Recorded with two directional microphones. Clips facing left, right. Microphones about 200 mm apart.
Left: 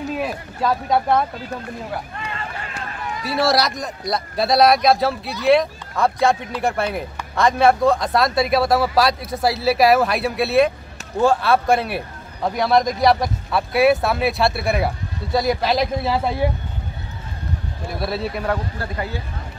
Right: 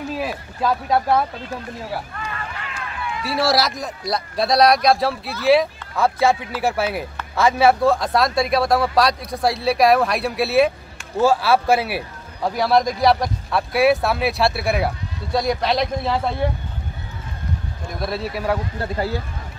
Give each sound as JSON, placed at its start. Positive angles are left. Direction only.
{"t": 0.1, "sound": "speech", "side_deg": 0}
{"t": 2.1, "sound": "run", "side_deg": 25}
{"t": 2.7, "sound": "run", "side_deg": 40}
{"t": 3.3, "sound": "speech", "side_deg": 0}
{"t": 17.8, "sound": "speech", "side_deg": 5}
{"t": 18.8, "sound": "speech", "side_deg": -35}